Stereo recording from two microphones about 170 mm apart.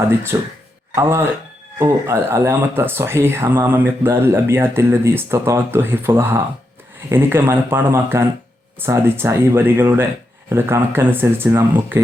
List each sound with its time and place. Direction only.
0.3 s speech: 20° right (ahead or behind)